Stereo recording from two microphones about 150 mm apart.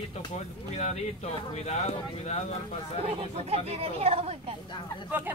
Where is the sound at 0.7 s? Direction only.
50° left (ahead or behind).